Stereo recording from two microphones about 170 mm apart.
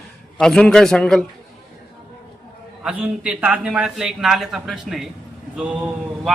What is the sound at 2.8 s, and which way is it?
A man's voice, 5° right (ahead or behind).